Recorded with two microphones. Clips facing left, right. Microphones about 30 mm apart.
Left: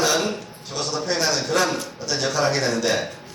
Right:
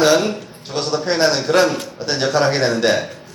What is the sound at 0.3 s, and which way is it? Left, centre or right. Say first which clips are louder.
A man's voice: right 4 dB; right.